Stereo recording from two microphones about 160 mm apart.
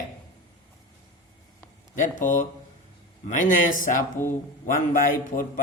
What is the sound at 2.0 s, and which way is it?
A man's voice, 55° left (ahead or behind).